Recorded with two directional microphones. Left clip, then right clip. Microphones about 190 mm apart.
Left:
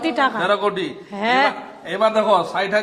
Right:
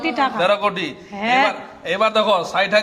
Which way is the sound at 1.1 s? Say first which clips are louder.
Right 1 dB; 15° left (ahead or behind).